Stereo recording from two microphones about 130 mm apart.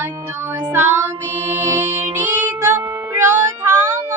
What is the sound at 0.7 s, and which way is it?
Child singing, 20° right (ahead or behind).